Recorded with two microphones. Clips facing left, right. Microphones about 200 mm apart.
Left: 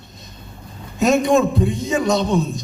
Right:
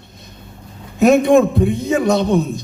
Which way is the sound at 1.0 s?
60° right (ahead or behind).